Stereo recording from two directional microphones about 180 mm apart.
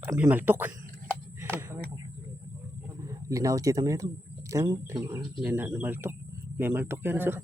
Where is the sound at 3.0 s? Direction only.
20° right (ahead or behind).